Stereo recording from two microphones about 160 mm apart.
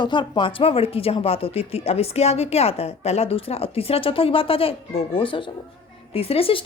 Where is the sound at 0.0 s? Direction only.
30° left (ahead or behind).